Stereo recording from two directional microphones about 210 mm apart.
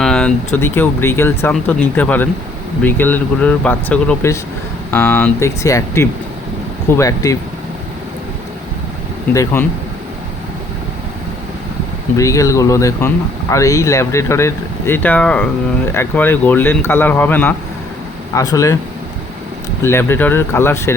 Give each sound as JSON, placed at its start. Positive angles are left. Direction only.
{"t": 0.0, "sound": "speech", "side_deg": 5}
{"t": 9.3, "sound": "speech", "side_deg": 15}
{"t": 12.1, "sound": "speech", "side_deg": 15}
{"t": 19.8, "sound": "speech", "side_deg": 10}